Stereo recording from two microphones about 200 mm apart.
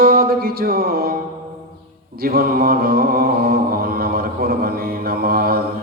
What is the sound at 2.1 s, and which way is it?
Mantra, 50° right (ahead or behind).